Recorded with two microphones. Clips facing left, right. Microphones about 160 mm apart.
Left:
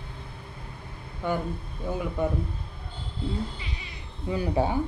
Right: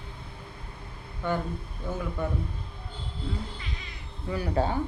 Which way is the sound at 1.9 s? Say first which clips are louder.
Left 3 dB; 15° left (ahead or behind).